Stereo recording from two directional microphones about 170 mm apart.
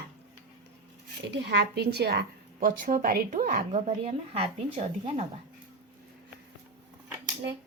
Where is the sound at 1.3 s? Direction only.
80° right; by 5.2 s 35° right (ahead or behind).